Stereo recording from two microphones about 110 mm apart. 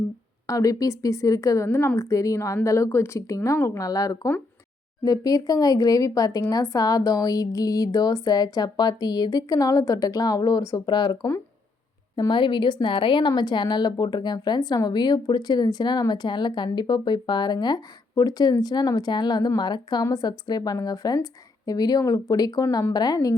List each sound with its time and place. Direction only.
0.4 s speech: 30° left (ahead or behind)
12.3 s speech: 45° left (ahead or behind)